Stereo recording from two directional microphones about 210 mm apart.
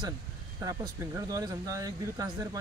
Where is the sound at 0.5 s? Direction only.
15° right (ahead or behind).